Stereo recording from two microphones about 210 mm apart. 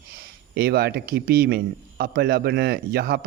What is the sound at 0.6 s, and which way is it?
Speech, 45° right (ahead or behind).